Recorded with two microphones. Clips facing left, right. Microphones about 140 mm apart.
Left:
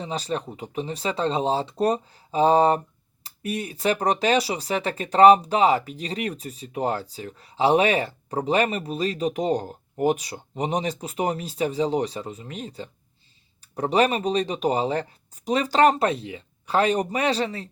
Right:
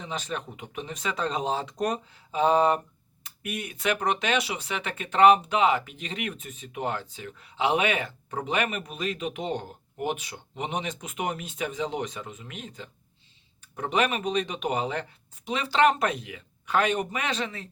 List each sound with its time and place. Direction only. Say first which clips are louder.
0.0 s speech: left 5 dB; 35° left (ahead or behind)